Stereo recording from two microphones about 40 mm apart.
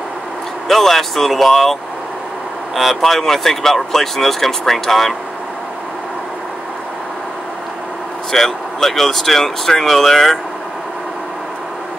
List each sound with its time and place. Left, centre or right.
0.7 s speech: centre
8.3 s speech: centre